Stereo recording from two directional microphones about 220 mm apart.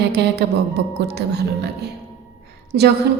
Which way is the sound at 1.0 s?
50° right (ahead or behind).